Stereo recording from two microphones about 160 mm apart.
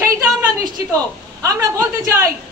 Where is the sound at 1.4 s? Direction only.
20° right (ahead or behind).